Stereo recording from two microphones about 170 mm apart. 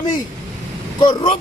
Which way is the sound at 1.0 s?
25° left (ahead or behind).